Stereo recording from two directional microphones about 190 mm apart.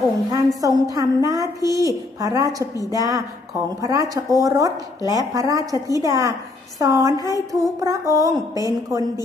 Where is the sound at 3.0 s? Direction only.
20° right (ahead or behind).